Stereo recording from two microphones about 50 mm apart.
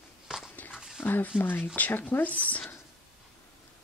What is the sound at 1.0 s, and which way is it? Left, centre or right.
Speech, left.